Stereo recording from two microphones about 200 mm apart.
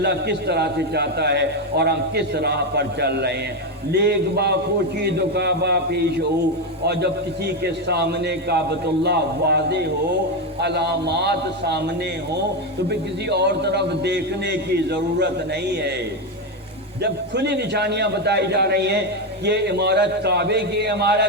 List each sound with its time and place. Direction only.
0.0 s a man's voice: 55° right (ahead or behind)
12.9 s a man's voice: 55° right (ahead or behind)
17.0 s a man's voice: 55° right (ahead or behind)